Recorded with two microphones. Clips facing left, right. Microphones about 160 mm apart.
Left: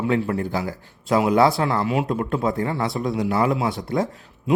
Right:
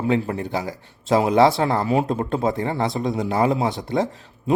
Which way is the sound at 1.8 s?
35° right (ahead or behind).